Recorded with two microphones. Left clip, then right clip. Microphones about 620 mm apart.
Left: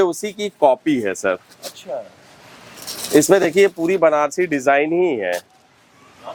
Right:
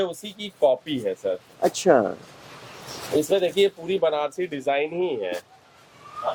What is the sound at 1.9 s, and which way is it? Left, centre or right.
Speech, right.